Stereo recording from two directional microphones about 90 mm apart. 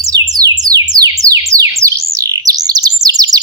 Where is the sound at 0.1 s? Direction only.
45° right (ahead or behind).